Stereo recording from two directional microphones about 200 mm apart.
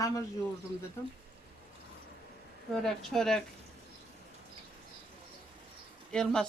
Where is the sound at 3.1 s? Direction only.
Centre (ahead or behind).